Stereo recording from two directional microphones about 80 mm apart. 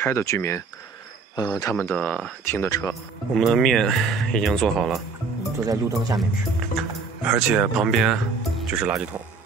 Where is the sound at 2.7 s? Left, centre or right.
Left.